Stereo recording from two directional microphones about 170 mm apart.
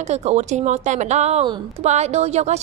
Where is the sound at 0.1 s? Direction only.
40° right (ahead or behind).